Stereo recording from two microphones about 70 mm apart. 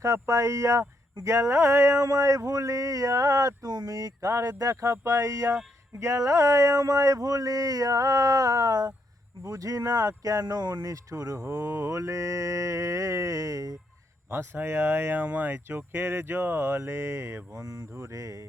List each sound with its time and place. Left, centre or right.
0.0 s speech: right
10.4 s speech: right
11.3 s speech: right
14.3 s speech: right